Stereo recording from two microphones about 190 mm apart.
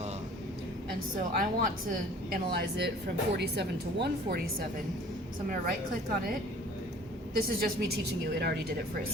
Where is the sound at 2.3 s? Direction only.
60° right (ahead or behind).